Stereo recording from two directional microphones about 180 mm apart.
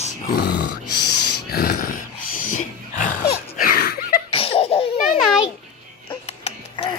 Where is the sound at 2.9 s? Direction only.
45° left (ahead or behind).